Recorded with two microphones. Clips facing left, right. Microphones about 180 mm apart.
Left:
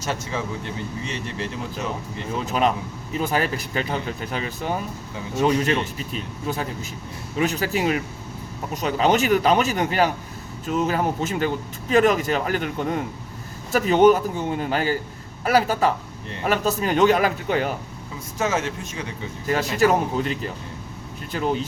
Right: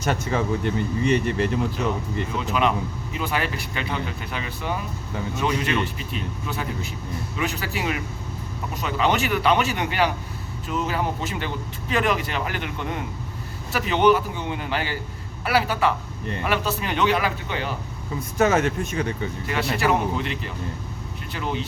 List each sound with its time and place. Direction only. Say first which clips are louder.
0.0 s speech: right 4 dB; 55° right (ahead or behind)
2.5 s speech: left 1 dB; 40° left (ahead or behind)
18.3 s speech: right 4 dB; 60° right (ahead or behind)
19.5 s speech: left 4 dB; 45° left (ahead or behind)